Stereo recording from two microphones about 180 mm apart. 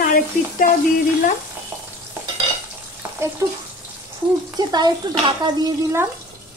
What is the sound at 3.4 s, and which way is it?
Speech, 20° right (ahead or behind).